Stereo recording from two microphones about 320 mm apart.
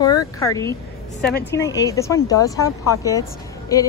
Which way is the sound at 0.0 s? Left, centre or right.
Centre.